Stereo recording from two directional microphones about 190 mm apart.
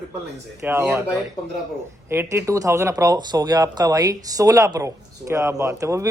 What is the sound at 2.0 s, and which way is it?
Speech, 15° right (ahead or behind).